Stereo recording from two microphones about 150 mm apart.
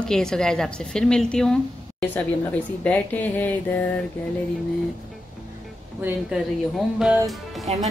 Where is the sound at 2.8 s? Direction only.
10° left (ahead or behind).